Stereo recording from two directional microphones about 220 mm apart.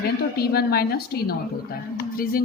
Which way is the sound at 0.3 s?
45° left (ahead or behind).